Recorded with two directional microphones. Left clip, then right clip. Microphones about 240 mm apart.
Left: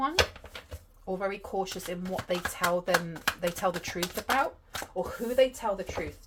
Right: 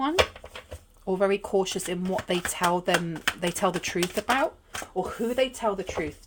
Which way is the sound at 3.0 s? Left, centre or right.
Right.